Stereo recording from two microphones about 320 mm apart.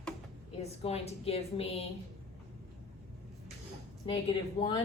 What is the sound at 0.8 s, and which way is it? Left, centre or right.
A woman's voice, centre.